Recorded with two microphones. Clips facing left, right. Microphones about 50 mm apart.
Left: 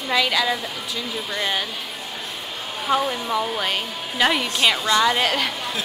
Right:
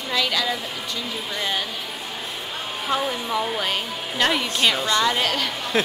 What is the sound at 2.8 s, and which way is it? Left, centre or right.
Speech, centre.